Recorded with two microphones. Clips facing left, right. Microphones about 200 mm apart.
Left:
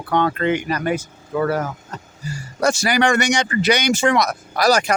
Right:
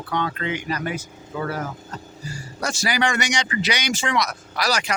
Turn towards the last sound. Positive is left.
turn(degrees=50)  # may be behind; listen again after turning